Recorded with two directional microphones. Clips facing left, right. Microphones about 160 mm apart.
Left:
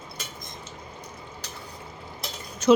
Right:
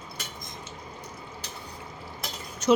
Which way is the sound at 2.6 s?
90° left.